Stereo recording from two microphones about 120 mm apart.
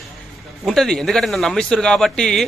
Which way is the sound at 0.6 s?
5° left (ahead or behind).